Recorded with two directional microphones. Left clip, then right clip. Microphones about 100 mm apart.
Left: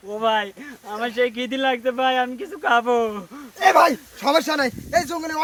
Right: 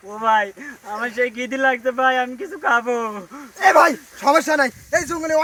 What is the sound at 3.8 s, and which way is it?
Speech, 20° left (ahead or behind).